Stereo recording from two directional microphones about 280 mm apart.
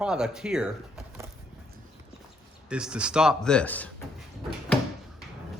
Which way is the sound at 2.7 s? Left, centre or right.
Centre.